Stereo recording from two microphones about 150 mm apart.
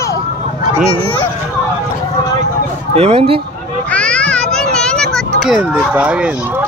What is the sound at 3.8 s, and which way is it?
Children playing, 10° left (ahead or behind).